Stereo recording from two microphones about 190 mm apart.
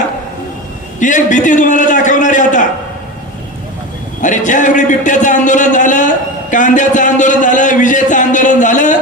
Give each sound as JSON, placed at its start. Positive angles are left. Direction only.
{"t": 0.9, "sound": "a man's voice", "side_deg": 40}
{"t": 4.2, "sound": "a man's voice", "side_deg": 40}